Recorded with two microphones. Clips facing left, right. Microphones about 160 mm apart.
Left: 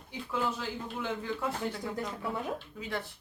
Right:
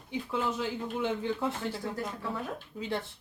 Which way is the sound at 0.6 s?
20° right (ahead or behind).